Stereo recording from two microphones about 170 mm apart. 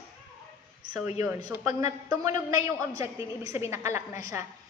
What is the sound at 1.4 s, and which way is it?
A woman's voice, 20° right (ahead or behind).